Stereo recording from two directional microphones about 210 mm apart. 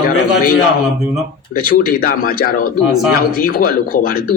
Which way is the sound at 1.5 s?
45° left (ahead or behind).